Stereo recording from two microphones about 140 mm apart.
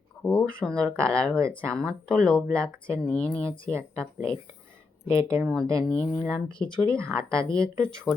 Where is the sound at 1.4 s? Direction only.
20° right (ahead or behind).